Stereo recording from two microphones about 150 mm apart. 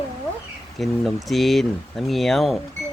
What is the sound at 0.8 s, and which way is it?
Speech, centre (ahead or behind).